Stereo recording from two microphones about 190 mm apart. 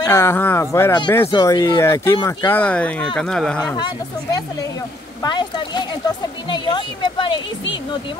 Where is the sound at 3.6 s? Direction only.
20° left (ahead or behind).